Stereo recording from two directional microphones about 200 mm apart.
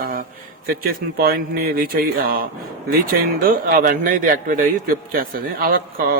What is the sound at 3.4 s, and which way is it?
A man's voice, 45° right (ahead or behind).